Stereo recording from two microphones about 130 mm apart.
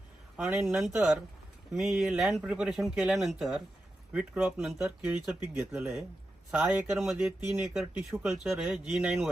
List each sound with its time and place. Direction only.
0.3 s a man's voice: 5° right (ahead or behind)
6.5 s a man's voice: 10° right (ahead or behind)